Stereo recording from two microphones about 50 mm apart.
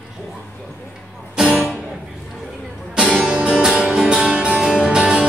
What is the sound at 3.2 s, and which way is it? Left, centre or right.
Music, centre.